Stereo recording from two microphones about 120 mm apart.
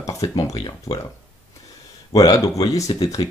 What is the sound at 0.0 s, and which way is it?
Speech, 30° left (ahead or behind).